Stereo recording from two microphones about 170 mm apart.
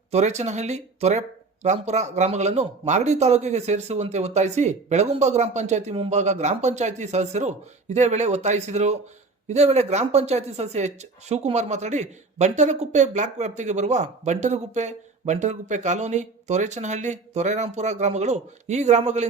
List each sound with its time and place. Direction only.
0.1 s speech: 40° right (ahead or behind)